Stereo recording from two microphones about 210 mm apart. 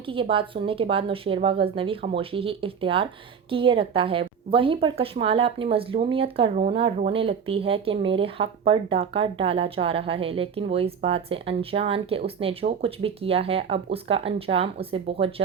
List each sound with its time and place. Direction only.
0.1 s speech: 25° right (ahead or behind)